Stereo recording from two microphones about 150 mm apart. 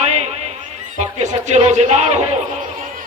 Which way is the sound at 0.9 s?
50° right (ahead or behind).